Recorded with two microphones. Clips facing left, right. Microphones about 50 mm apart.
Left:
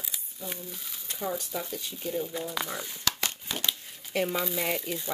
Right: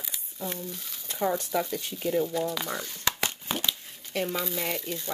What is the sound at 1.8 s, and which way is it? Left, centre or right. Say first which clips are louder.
Speech: right 3 dB; right.